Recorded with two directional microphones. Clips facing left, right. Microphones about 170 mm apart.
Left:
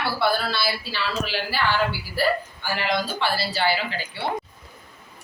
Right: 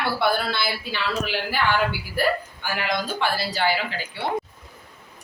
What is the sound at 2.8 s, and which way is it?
A woman's voice, 15° right (ahead or behind).